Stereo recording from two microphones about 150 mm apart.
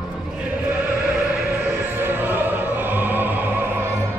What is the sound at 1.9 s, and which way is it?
Opera, 15° right (ahead or behind).